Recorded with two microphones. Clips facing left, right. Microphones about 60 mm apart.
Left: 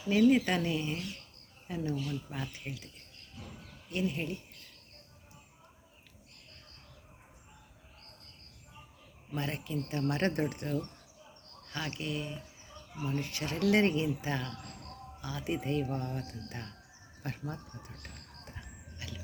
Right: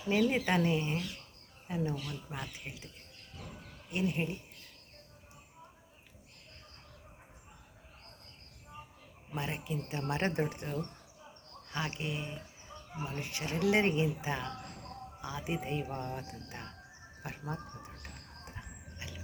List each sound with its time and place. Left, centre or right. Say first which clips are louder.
0.2 s speech: left 5 dB; centre
3.9 s speech: even; centre
9.3 s speech: left 2 dB; centre
18.4 s a sound: right 1 dB; centre